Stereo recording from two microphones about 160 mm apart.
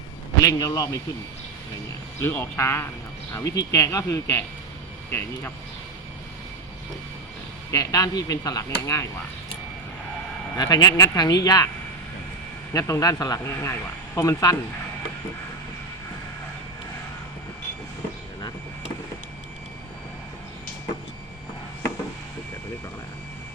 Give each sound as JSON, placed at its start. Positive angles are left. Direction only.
{"t": 0.4, "sound": "speech", "side_deg": 20}
{"t": 2.2, "sound": "speech", "side_deg": 15}
{"t": 7.7, "sound": "speech", "side_deg": 20}
{"t": 10.6, "sound": "speech", "side_deg": 25}
{"t": 12.7, "sound": "speech", "side_deg": 20}